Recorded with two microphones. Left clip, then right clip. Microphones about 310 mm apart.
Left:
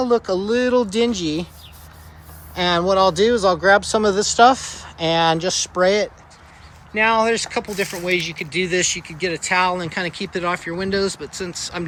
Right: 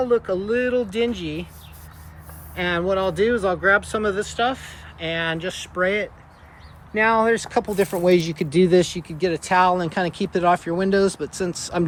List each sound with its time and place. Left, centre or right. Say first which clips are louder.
0.3 s speech: left 3 dB; centre
2.6 s speech: left 5 dB; centre
6.9 s speech: left 1 dB; centre